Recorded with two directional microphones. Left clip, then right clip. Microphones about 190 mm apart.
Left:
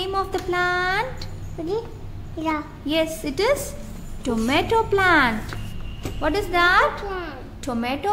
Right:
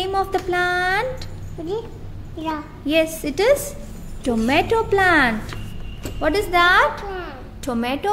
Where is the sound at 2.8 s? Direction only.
15° right (ahead or behind).